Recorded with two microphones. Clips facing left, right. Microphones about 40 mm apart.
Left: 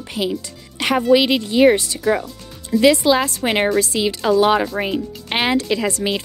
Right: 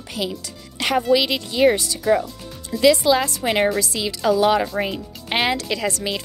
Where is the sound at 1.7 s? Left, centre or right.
Left; by 5.5 s centre.